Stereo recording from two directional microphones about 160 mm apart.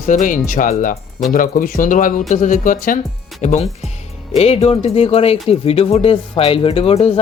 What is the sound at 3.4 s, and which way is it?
Speech, 45° left (ahead or behind).